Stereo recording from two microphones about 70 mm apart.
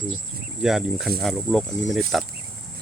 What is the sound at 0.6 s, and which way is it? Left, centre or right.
Speech, centre.